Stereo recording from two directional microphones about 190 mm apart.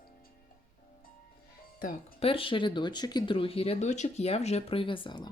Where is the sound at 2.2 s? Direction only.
30° left (ahead or behind).